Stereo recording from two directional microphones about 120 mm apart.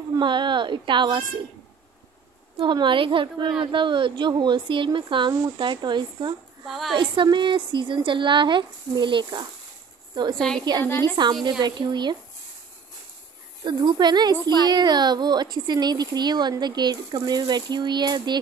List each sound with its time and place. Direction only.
0.1 s speech: 40° right (ahead or behind)
2.6 s a woman's voice: 40° right (ahead or behind)
10.3 s a woman's voice: 5° left (ahead or behind)
10.8 s a woman's voice: 20° left (ahead or behind)
11.6 s speech: 35° right (ahead or behind)
13.7 s speech: 40° right (ahead or behind)